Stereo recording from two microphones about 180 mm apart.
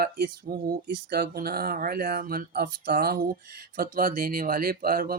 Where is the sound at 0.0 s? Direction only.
55° right (ahead or behind).